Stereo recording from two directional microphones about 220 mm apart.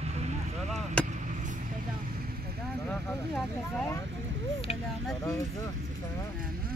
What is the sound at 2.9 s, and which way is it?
Vehicle, 5° left (ahead or behind).